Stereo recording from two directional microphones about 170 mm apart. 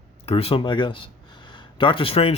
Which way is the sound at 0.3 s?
35° left (ahead or behind).